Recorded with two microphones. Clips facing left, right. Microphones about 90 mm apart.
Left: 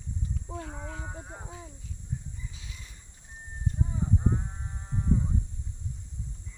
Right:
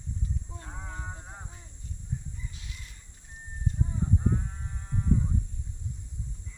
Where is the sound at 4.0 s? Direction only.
15° left (ahead or behind).